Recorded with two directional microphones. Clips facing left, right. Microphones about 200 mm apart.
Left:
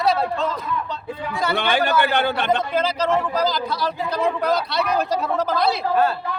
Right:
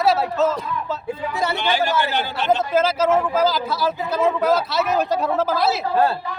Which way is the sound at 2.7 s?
5° right (ahead or behind).